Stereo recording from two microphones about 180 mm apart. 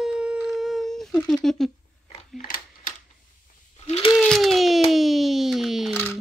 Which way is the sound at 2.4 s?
50° left (ahead or behind).